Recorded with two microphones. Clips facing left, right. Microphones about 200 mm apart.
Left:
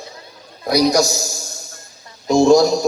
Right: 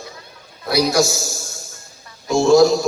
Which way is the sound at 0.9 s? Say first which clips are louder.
Left 1 dB; 40° left (ahead or behind).